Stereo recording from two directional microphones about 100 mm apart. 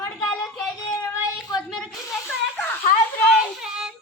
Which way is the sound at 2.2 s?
20° left (ahead or behind).